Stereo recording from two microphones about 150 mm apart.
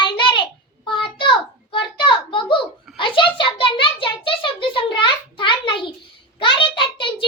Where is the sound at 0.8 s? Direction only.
35° left (ahead or behind).